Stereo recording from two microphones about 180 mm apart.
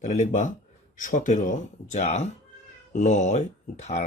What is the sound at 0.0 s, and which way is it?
Speech, 45° left (ahead or behind).